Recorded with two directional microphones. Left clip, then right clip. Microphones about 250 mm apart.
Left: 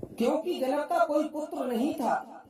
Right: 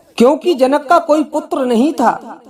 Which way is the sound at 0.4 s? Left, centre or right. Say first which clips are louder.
Right 17 dB; right.